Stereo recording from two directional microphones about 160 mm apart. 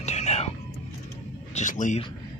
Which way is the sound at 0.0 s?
45° left (ahead or behind).